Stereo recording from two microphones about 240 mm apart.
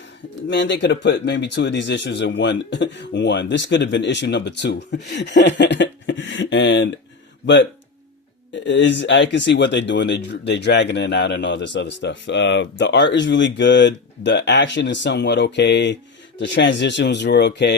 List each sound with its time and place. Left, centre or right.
0.4 s speech: left